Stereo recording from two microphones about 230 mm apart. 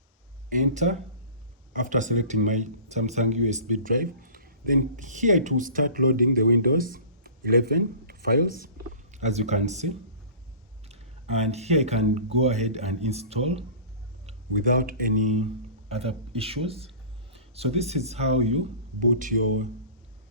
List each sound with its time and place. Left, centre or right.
0.5 s speech: right
15.9 s speech: right